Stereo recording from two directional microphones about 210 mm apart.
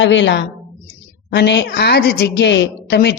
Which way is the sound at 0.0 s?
60° left (ahead or behind).